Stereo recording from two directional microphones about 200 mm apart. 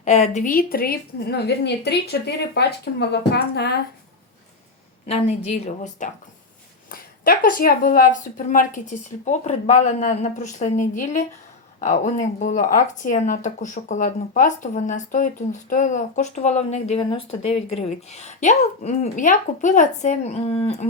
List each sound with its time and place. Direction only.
0.0 s a woman's voice: 35° left (ahead or behind); by 3.8 s 55° left (ahead or behind)
5.0 s a woman's voice: 30° left (ahead or behind)
6.9 s speech: 45° left (ahead or behind)